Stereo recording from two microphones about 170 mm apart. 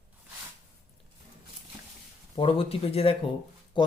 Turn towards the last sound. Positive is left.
turn(degrees=30)  # may be behind; listen again after turning